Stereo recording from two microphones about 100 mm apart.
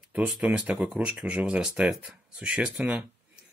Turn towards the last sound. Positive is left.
turn(degrees=-10)  # may be behind; listen again after turning